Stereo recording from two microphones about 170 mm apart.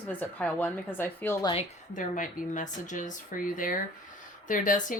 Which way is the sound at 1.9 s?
50° left (ahead or behind).